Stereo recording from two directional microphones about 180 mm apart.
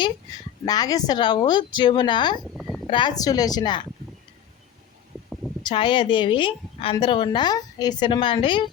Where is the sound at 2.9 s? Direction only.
25° left (ahead or behind).